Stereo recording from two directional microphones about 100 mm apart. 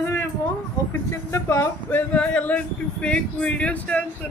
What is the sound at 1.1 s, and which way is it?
Speech, 30° left (ahead or behind).